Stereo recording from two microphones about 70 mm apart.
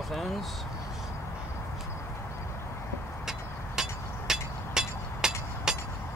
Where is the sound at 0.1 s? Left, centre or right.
Centre.